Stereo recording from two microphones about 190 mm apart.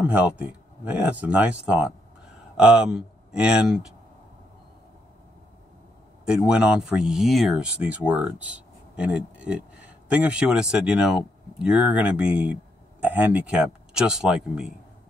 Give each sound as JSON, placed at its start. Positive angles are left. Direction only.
{"t": 0.0, "sound": "speech", "side_deg": -5}
{"t": 6.2, "sound": "speech", "side_deg": -5}